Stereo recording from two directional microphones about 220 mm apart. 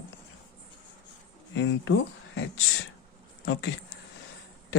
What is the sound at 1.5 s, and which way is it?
Speech, 55° left (ahead or behind).